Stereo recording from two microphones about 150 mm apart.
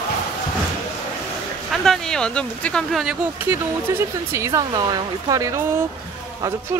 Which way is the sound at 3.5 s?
15° right (ahead or behind).